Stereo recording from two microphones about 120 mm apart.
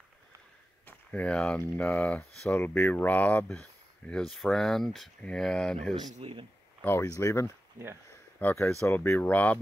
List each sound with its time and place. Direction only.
0.8 s speech: 10° left (ahead or behind)
6.1 s speech: 50° right (ahead or behind)
7.0 s speech: 25° left (ahead or behind)